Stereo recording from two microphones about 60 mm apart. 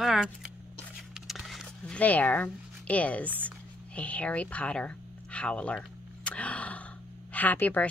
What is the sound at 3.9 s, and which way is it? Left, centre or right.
Speech, left.